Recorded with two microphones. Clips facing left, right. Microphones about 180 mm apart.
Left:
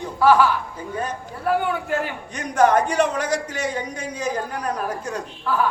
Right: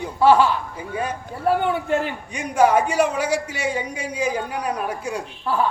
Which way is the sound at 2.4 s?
10° right (ahead or behind).